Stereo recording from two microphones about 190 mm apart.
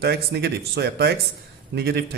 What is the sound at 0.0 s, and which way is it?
Speech, 55° right (ahead or behind).